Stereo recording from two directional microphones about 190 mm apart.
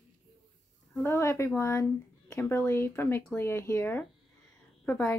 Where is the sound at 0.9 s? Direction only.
10° left (ahead or behind).